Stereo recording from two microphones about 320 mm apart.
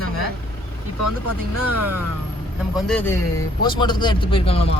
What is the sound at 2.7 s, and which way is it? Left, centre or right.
Speech, centre.